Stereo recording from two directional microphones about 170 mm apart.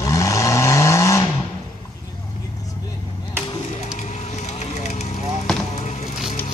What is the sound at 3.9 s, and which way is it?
Vehicle, 45° left (ahead or behind).